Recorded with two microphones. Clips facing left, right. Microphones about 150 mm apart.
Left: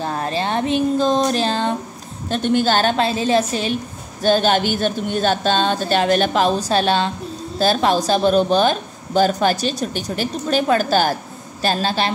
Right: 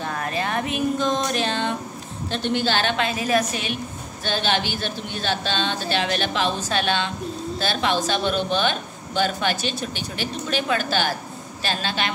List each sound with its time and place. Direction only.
0.0 s speech: 30° left (ahead or behind)
2.2 s speech: 45° left (ahead or behind); by 3.7 s 30° left (ahead or behind)
4.2 s speech: 45° left (ahead or behind)